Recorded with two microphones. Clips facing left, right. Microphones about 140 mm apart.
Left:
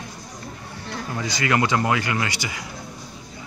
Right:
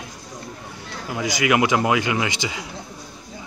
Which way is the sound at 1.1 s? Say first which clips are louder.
Right 3 dB; 15° right (ahead or behind).